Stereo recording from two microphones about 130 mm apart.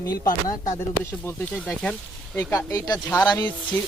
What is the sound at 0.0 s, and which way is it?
Speech, 30° left (ahead or behind).